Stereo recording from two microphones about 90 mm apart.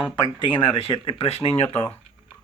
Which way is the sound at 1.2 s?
90° left.